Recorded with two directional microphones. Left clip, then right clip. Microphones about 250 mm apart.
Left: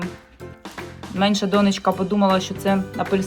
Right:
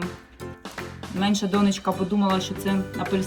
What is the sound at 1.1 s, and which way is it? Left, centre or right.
Speech, centre.